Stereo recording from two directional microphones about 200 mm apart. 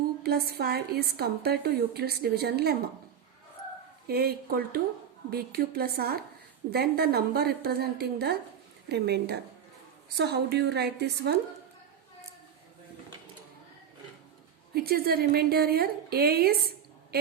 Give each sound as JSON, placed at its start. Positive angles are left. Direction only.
{"t": 0.2, "sound": "a woman's voice", "side_deg": -50}
{"t": 4.0, "sound": "a woman's voice", "side_deg": -50}
{"t": 14.7, "sound": "a woman's voice", "side_deg": -50}